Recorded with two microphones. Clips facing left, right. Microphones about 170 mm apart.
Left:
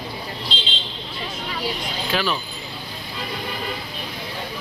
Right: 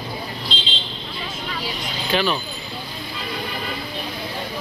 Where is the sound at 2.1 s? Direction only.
Centre (ahead or behind).